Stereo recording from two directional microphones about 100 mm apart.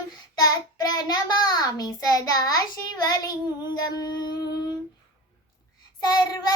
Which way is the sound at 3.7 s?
40° left (ahead or behind).